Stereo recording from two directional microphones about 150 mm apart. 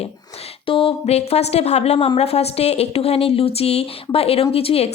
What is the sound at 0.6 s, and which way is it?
A woman's voice, 35° left (ahead or behind).